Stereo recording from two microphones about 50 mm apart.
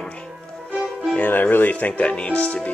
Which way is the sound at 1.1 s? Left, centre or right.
Left.